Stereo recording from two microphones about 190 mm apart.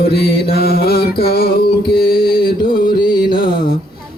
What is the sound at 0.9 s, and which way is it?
Music, 30° left (ahead or behind).